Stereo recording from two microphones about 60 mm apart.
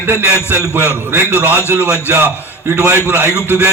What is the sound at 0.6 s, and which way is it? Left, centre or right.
Speech, left.